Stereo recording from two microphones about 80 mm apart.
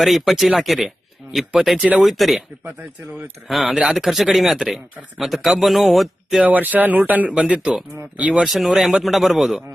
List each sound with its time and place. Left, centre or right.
0.0 s a man's voice: centre
3.1 s speech: right
3.5 s a man's voice: centre
6.4 s speech: centre
8.4 s a man's voice: centre